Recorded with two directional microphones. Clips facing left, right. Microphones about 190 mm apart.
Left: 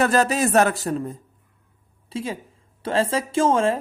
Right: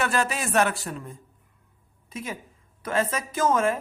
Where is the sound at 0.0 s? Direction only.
40° left (ahead or behind).